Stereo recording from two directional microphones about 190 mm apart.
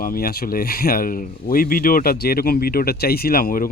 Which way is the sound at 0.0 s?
50° left (ahead or behind).